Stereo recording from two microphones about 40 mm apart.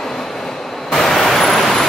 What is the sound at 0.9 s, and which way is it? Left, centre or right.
Vehicle, centre.